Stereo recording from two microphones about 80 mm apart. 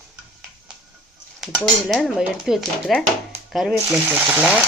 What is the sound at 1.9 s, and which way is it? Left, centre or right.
Frying, centre.